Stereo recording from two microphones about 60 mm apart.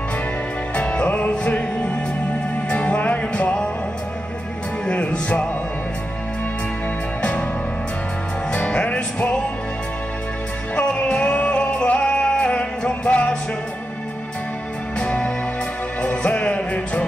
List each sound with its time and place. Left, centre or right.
0.7 s music: left
4.8 s music: centre
7.2 s music: left
8.5 s music: centre
10.8 s music: centre
15.0 s music: centre